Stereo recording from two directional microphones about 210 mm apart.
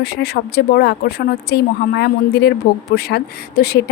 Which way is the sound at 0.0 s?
50° left (ahead or behind).